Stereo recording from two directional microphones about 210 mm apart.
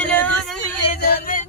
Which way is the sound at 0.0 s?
5° left (ahead or behind).